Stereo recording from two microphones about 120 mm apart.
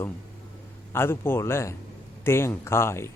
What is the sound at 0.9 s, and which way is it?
Speech, 20° left (ahead or behind).